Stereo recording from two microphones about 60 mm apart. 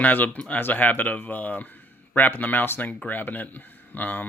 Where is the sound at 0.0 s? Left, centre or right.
Left.